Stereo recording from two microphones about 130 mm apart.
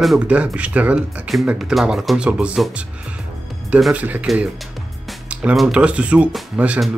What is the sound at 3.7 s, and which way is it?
Speech, 10° right (ahead or behind).